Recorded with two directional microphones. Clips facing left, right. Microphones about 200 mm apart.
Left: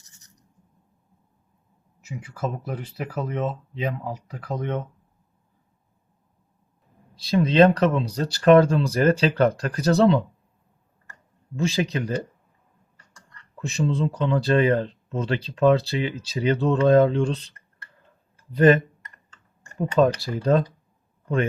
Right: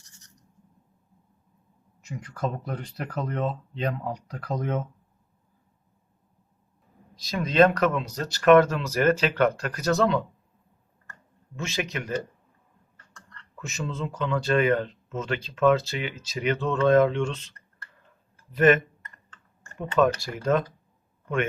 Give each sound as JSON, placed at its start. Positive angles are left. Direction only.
{"t": 2.0, "sound": "speech", "side_deg": 5}
{"t": 7.2, "sound": "speech", "side_deg": 30}
{"t": 11.5, "sound": "speech", "side_deg": 35}
{"t": 13.6, "sound": "speech", "side_deg": 30}
{"t": 18.5, "sound": "speech", "side_deg": 35}
{"t": 19.8, "sound": "speech", "side_deg": 35}